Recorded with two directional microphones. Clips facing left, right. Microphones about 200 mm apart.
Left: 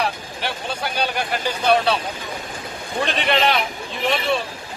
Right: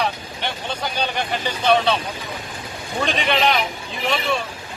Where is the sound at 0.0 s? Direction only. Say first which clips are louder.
Even; 10° left (ahead or behind).